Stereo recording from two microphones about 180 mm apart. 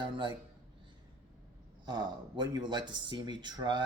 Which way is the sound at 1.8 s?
25° right (ahead or behind).